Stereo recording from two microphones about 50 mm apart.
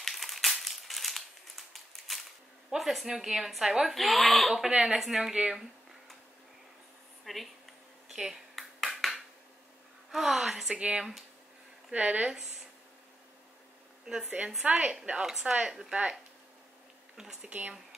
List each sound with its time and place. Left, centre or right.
0.0 s crumpling: centre
2.7 s a woman's voice: centre
7.2 s a sound: centre
8.1 s finger snapping: centre
8.5 s a sound: centre
10.1 s a woman's voice: centre
10.7 s speech: right
14.0 s a woman's voice: centre
14.6 s speech: right
15.1 s a woman's voice: centre
17.2 s a woman's voice: centre
17.5 s speech: right